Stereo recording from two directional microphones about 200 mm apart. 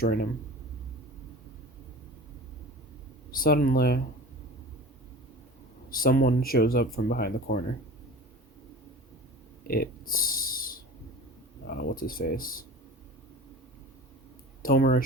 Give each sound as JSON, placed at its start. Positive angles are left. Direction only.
{"t": 0.0, "sound": "speech", "side_deg": 50}
{"t": 3.3, "sound": "speech", "side_deg": 45}
{"t": 5.9, "sound": "speech", "side_deg": 45}
{"t": 9.6, "sound": "a sound", "side_deg": 50}
{"t": 11.6, "sound": "speech", "side_deg": 50}
{"t": 14.6, "sound": "speech", "side_deg": 45}